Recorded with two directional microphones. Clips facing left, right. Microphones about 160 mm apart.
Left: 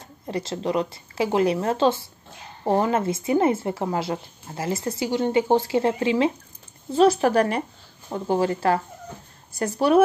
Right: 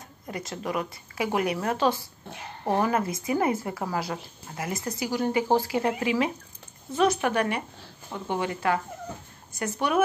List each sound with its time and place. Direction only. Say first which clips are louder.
0.3 s a woman's voice: left 6 dB; 30° left (ahead or behind)